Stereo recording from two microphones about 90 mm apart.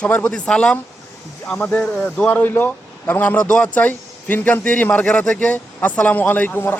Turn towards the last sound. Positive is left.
turn(degrees=20)  # may be behind; listen again after turning